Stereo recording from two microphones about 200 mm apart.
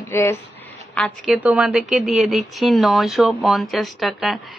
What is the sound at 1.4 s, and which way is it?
Speech, 5° right (ahead or behind).